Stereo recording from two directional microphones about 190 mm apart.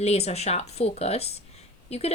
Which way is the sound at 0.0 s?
35° left (ahead or behind).